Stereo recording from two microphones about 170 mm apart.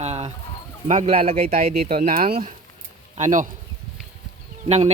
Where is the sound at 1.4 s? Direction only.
60° right (ahead or behind).